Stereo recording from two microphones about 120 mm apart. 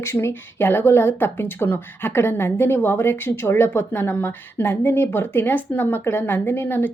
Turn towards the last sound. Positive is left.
turn(degrees=20)  # may be behind; listen again after turning